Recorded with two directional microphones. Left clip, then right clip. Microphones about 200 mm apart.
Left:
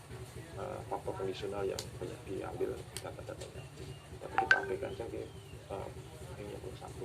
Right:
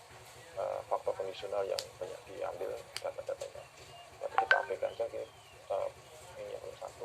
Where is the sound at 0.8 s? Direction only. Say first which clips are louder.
Right 3 dB; 25° left (ahead or behind).